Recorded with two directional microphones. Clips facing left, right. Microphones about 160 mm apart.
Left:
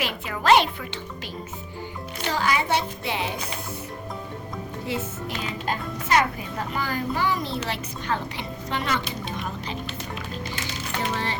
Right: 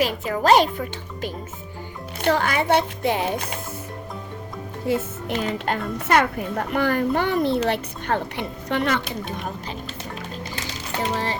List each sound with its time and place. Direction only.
0.0 s speech: 40° right (ahead or behind)
2.2 s a child's voice: 55° right (ahead or behind)
4.9 s speech: 45° right (ahead or behind)
5.5 s a child's voice: 60° right (ahead or behind)
11.1 s speech: 40° right (ahead or behind)